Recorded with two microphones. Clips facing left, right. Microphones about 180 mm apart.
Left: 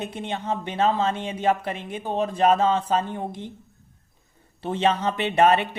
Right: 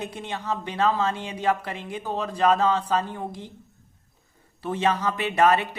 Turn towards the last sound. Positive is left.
turn(degrees=25)  # may be behind; listen again after turning